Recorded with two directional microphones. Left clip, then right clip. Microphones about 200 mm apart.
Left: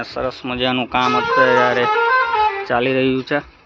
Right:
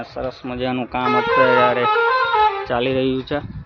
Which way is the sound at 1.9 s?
55° left (ahead or behind).